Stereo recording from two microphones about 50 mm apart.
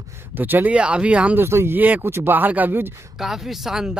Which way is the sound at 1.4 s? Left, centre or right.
Right.